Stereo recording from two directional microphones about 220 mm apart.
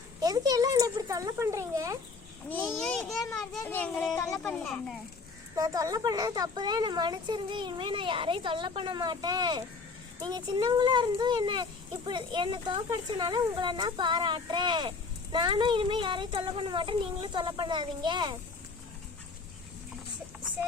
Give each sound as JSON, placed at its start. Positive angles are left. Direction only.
{"t": 0.2, "sound": "speech", "side_deg": -15}
{"t": 2.5, "sound": "a child's voice", "side_deg": 5}
{"t": 5.5, "sound": "a child's voice", "side_deg": -15}